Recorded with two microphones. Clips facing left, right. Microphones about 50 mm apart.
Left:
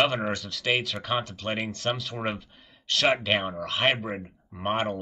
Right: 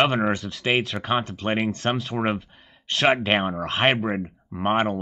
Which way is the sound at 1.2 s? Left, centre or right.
Right.